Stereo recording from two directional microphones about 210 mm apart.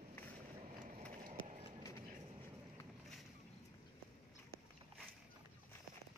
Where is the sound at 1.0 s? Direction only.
35° right (ahead or behind).